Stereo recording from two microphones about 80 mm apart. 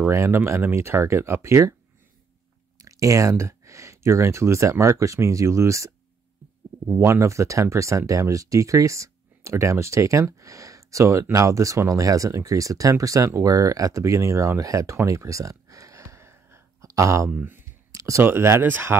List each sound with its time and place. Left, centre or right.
0.1 s speech: right
2.8 s speech: right
14.6 s a sound: right
17.3 s speech: centre
17.9 s a sound: right
18.2 s speech: right